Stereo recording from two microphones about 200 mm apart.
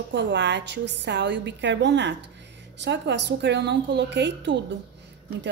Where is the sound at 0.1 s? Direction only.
60° right (ahead or behind).